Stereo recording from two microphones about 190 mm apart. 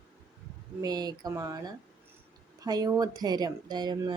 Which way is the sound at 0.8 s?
20° right (ahead or behind).